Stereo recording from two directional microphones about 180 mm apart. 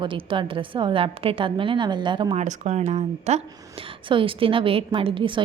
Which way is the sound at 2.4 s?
40° right (ahead or behind).